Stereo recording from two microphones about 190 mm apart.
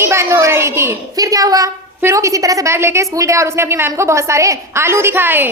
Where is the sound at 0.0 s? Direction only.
15° right (ahead or behind).